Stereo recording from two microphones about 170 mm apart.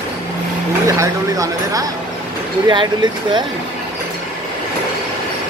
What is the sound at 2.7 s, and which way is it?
Speech, 25° right (ahead or behind).